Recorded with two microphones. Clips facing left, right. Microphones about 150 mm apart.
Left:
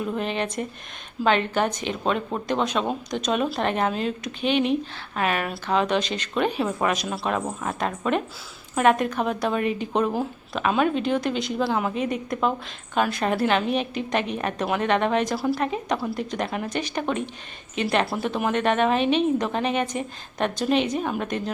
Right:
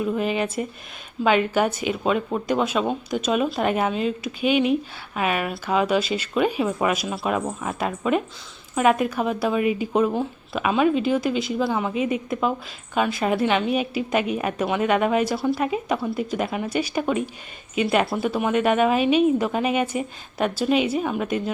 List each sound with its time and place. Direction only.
0.0 s a woman's voice: 5° right (ahead or behind)